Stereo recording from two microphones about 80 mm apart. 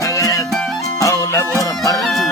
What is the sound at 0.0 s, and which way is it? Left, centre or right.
Music, left.